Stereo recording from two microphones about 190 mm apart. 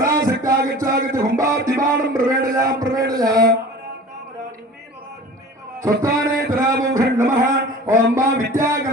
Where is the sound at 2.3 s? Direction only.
50° right (ahead or behind).